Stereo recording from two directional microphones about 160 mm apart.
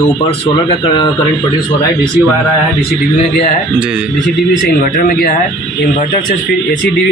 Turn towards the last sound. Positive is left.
turn(degrees=65)  # may be behind; listen again after turning